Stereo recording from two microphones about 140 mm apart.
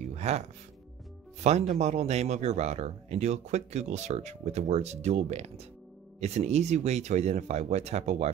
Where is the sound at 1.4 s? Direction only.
55° right (ahead or behind).